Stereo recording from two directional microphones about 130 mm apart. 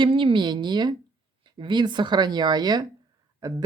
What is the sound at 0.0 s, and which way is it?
Speech, 40° right (ahead or behind).